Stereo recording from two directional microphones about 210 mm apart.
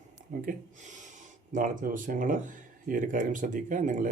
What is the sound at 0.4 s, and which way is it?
Speech, 35° right (ahead or behind).